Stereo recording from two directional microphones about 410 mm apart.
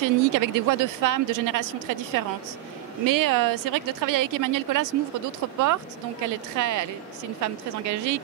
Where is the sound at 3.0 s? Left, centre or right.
Right.